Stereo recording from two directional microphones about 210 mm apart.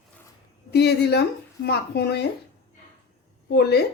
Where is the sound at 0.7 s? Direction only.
50° left (ahead or behind).